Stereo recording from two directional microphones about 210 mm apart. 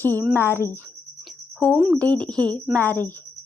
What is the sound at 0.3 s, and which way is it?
Speech, 10° left (ahead or behind).